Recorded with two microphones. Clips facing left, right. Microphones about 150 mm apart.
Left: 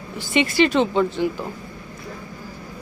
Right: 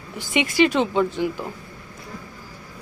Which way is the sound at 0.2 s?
15° right (ahead or behind).